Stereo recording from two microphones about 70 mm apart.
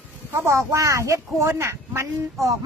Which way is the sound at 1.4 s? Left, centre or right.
Right.